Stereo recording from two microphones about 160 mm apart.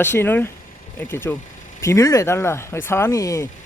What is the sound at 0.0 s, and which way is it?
Speech, 15° left (ahead or behind).